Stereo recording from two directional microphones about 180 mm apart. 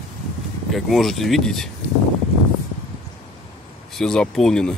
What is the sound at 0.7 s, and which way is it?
Speech, centre (ahead or behind).